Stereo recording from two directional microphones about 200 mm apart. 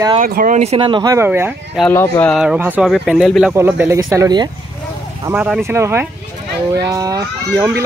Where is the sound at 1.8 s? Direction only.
15° left (ahead or behind).